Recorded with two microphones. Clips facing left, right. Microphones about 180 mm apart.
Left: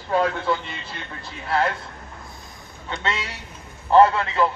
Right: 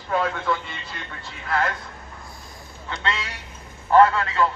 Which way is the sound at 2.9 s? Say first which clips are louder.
Left 1 dB; 25° left (ahead or behind).